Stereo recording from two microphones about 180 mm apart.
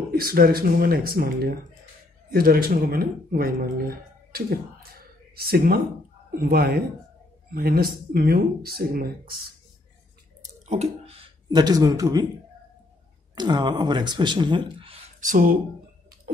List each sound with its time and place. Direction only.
0.1 s speech: 55° right (ahead or behind)
10.7 s speech: 35° right (ahead or behind)
13.3 s speech: 25° right (ahead or behind)
15.1 s speech: 50° right (ahead or behind)